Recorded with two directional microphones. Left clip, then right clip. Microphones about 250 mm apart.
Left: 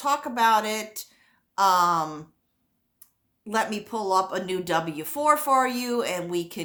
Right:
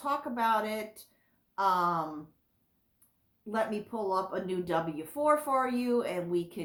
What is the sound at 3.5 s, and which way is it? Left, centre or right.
Speech, left.